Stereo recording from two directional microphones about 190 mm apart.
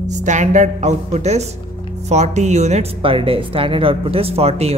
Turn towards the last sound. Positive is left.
turn(degrees=-35)  # may be behind; listen again after turning